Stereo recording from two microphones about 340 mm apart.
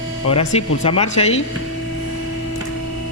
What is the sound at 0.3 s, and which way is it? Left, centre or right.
Speech, centre.